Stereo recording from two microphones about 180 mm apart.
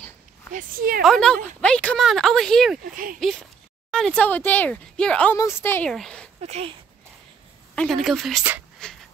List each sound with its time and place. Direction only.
0.5 s speech: 50° right (ahead or behind)
1.0 s speech: 5° left (ahead or behind)
2.8 s speech: 50° right (ahead or behind)
3.2 s speech: centre (ahead or behind)
6.4 s speech: 35° right (ahead or behind)
7.7 s speech: 5° left (ahead or behind)
8.8 s a sound: 5° left (ahead or behind)